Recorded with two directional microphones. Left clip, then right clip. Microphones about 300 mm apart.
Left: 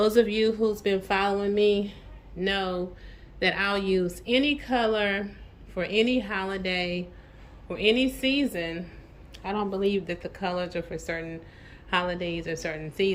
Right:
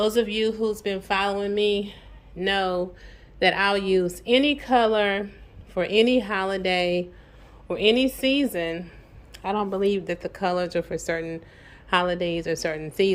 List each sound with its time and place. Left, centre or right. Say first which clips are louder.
0.0 s a woman's voice: left 1 dB; centre
9.3 s a sound: right 4 dB; centre
9.8 s a woman's voice: right 3 dB; centre